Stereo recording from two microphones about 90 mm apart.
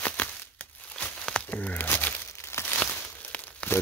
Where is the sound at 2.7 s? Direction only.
15° left (ahead or behind).